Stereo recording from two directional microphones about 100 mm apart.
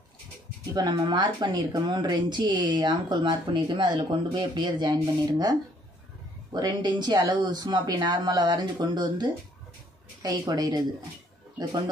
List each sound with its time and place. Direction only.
0.7 s a woman's voice: 45° right (ahead or behind)